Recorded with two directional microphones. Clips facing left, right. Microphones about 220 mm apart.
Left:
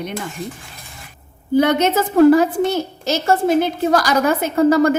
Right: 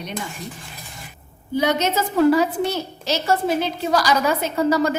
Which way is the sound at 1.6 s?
55° left (ahead or behind).